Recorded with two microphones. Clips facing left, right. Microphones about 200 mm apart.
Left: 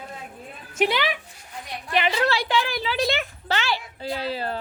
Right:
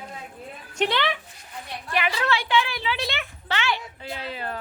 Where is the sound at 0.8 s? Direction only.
10° left (ahead or behind).